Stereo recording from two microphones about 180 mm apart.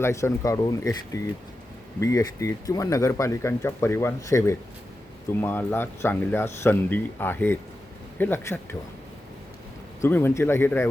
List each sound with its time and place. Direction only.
0.0 s speech: 15° left (ahead or behind)
10.0 s speech: 10° left (ahead or behind)